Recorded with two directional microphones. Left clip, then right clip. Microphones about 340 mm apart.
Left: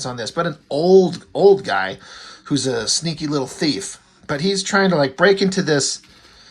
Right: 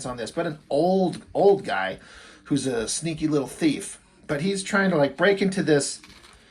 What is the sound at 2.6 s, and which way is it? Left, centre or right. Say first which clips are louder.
Speech: left 6 dB; left.